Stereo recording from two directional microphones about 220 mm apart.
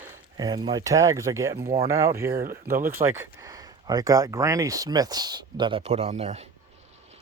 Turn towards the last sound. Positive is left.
turn(degrees=-30)  # may be behind; listen again after turning